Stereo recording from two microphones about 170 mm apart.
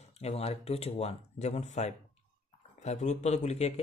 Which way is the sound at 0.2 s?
35° left (ahead or behind).